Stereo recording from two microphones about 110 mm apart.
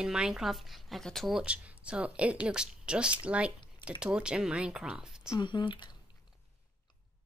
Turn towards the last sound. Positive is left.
turn(degrees=45)  # may be behind; listen again after turning